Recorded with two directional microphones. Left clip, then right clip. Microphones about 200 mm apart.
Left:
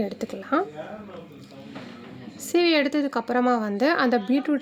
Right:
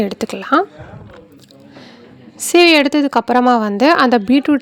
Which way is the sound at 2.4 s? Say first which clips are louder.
Right 11 dB; 40° right (ahead or behind).